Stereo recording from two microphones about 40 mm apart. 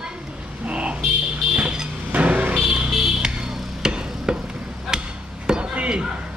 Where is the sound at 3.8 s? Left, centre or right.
Centre.